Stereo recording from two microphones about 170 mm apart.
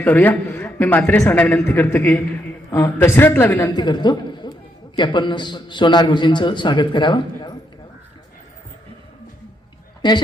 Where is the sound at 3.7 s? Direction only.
25° left (ahead or behind).